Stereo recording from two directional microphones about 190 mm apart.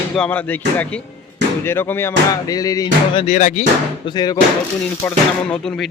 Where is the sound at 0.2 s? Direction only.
10° left (ahead or behind).